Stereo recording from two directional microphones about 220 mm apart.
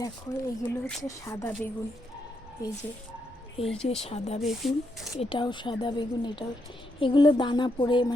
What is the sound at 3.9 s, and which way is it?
Speech, 25° left (ahead or behind).